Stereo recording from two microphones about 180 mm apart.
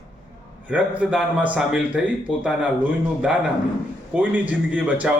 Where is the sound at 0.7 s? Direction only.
10° right (ahead or behind).